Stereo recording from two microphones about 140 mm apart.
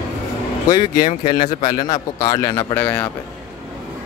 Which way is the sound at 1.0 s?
30° left (ahead or behind).